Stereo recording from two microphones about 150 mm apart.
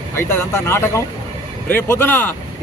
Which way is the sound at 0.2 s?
15° left (ahead or behind).